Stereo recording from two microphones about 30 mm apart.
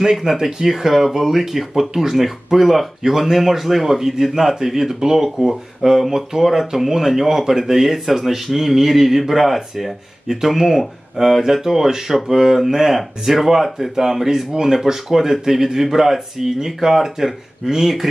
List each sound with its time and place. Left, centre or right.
0.0 s speech: centre